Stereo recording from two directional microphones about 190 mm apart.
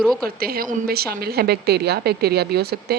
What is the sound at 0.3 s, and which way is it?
A woman's voice, 50° right (ahead or behind).